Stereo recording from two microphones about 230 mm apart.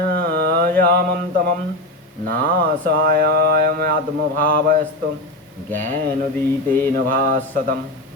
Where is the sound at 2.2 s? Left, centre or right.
Right.